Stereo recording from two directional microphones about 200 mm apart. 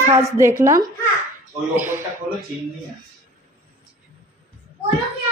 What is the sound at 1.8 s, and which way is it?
Speech, 10° right (ahead or behind).